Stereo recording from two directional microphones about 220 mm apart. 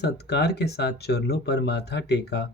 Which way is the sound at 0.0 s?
50° left (ahead or behind).